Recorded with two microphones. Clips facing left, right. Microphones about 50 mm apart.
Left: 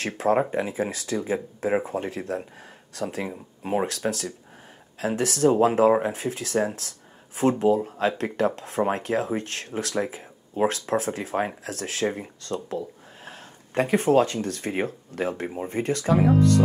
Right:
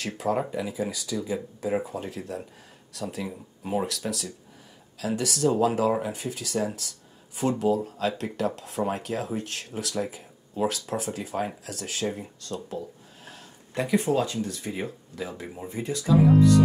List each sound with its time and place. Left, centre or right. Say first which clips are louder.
0.0 s speech: left 5 dB; left
5.1 s speech: left 2 dB; left
5.4 s speech: left 5 dB; left
6.1 s speech: left 4 dB; left